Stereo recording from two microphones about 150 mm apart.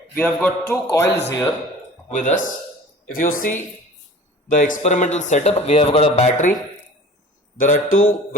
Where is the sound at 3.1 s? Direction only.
70° left (ahead or behind).